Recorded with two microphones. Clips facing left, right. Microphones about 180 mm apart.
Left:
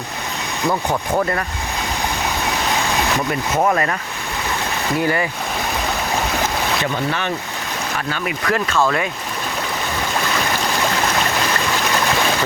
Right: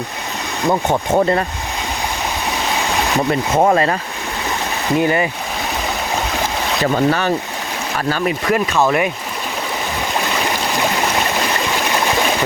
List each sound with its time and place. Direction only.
0.7 s speech: 25° right (ahead or behind)
3.5 s speech: 30° right (ahead or behind)
4.9 s speech: 20° right (ahead or behind)
6.9 s speech: 40° right (ahead or behind)
8.4 s speech: 20° right (ahead or behind)